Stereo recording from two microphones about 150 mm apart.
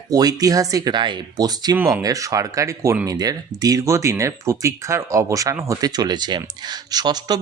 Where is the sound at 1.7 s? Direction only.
15° right (ahead or behind).